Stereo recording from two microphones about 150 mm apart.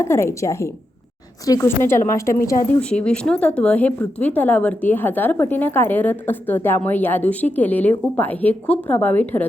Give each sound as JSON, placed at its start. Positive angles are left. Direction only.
{"t": 0.0, "sound": "a woman's voice", "side_deg": 15}
{"t": 2.9, "sound": "a woman's voice", "side_deg": 5}